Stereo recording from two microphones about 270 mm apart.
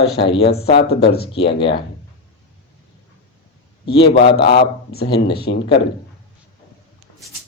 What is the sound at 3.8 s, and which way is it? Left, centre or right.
Speech, left.